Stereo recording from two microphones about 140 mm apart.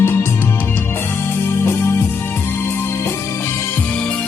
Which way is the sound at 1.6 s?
20° left (ahead or behind).